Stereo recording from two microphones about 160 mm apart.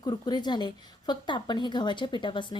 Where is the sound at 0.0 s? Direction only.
25° left (ahead or behind).